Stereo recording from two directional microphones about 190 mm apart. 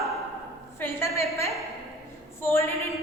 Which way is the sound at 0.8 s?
15° left (ahead or behind).